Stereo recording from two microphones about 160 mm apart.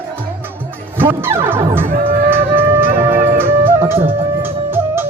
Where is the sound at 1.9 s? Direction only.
70° right (ahead or behind).